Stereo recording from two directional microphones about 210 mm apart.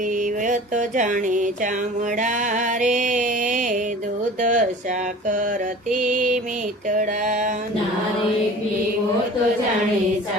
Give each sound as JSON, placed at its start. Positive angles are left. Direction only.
{"t": 0.2, "sound": "music", "side_deg": -35}
{"t": 4.4, "sound": "speech", "side_deg": -35}
{"t": 5.9, "sound": "mantra", "side_deg": -40}
{"t": 6.8, "sound": "a sound", "side_deg": -40}